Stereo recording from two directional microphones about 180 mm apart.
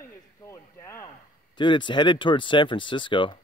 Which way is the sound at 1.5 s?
25° left (ahead or behind).